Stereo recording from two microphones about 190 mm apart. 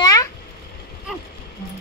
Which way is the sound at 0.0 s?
20° left (ahead or behind).